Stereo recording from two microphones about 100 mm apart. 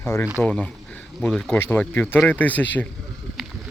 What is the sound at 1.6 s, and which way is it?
Speech, 20° left (ahead or behind).